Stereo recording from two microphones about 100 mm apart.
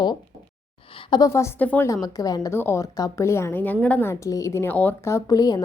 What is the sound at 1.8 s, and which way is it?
Speech, 35° left (ahead or behind).